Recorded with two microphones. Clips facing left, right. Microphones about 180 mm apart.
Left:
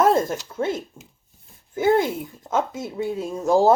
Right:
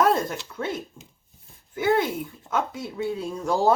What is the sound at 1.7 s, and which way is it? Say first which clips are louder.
Speech: left 3 dB; 45° left (ahead or behind).